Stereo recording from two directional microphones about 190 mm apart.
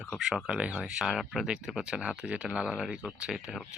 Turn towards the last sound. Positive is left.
turn(degrees=0)  # may be behind; listen again after turning